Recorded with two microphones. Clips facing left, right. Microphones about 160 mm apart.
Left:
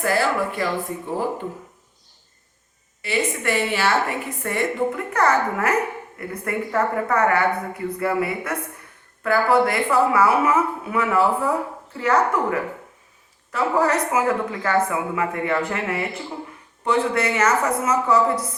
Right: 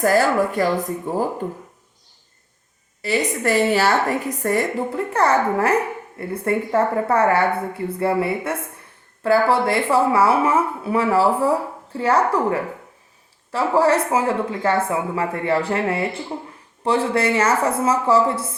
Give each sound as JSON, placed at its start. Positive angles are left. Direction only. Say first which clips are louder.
{"t": 0.0, "sound": "a woman's voice", "louder": "right 4 dB", "side_deg": -40}
{"t": 3.0, "sound": "a woman's voice", "louder": "right 3 dB", "side_deg": -40}